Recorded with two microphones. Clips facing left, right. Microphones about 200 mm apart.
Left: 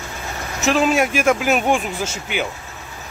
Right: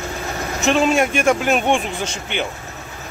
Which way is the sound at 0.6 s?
Centre (ahead or behind).